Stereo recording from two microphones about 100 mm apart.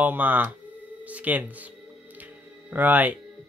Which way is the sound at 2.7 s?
15° right (ahead or behind).